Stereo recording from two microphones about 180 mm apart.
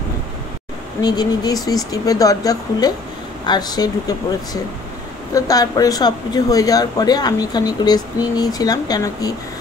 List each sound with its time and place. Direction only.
1.0 s speech: 20° left (ahead or behind)
5.3 s speech: 20° left (ahead or behind)